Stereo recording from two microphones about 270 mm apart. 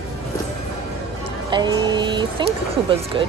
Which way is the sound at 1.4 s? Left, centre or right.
Centre.